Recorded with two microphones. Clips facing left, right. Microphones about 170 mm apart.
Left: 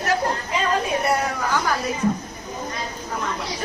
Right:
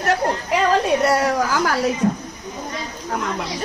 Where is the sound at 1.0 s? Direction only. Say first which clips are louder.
Right 5 dB; 90° right.